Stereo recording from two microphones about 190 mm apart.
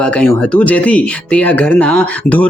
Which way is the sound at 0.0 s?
5° left (ahead or behind).